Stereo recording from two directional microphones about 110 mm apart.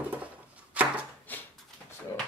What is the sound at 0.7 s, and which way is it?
Chopping, 15° right (ahead or behind).